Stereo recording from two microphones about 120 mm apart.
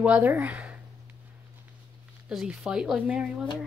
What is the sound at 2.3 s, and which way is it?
A woman's voice, 5° right (ahead or behind).